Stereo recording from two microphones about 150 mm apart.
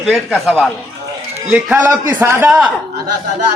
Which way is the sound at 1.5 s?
10° right (ahead or behind).